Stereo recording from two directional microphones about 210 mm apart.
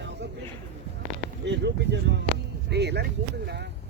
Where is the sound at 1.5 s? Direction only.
55° right (ahead or behind).